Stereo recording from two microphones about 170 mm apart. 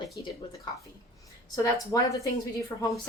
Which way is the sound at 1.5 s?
20° left (ahead or behind).